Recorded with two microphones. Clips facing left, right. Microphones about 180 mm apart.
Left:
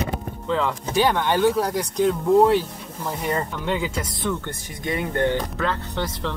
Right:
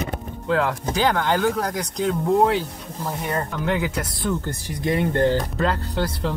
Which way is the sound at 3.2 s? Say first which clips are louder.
Even; centre (ahead or behind).